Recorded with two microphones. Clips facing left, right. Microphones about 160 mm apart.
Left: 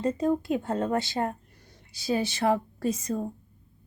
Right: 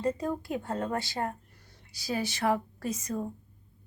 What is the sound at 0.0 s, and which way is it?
A woman's voice, 25° left (ahead or behind).